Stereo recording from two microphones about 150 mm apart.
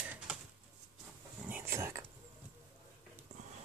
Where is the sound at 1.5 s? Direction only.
15° right (ahead or behind).